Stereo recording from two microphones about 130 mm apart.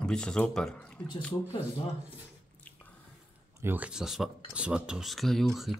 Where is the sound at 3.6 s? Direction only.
15° right (ahead or behind).